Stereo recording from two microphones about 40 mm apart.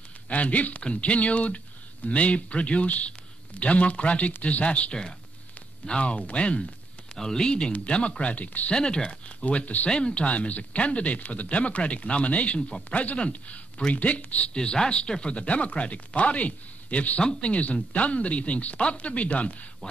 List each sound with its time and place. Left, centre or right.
0.3 s speech: left
7.2 s speech: centre; by 8.7 s left
8.7 s speech: left
9.4 s speech: left
9.8 s speech: left
10.3 s speech: left
14.5 s speech: left
17.2 s speech: left
17.5 s speech: left